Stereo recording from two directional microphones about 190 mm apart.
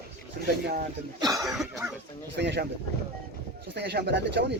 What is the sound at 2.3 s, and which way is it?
Speech, 65° right (ahead or behind).